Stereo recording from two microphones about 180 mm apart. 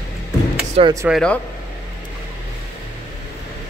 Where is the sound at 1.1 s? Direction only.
5° left (ahead or behind).